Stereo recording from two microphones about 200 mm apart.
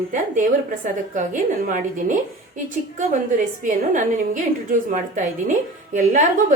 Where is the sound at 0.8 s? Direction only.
40° right (ahead or behind).